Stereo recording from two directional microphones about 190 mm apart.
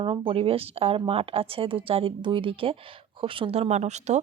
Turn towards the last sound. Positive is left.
turn(degrees=-35)  # may be behind; listen again after turning